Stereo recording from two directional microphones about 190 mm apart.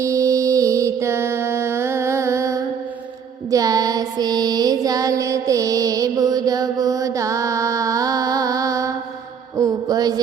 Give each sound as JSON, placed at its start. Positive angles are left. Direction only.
{"t": 0.0, "sound": "mantra", "side_deg": -15}
{"t": 3.5, "sound": "music", "side_deg": -20}
{"t": 9.6, "sound": "a sound", "side_deg": -20}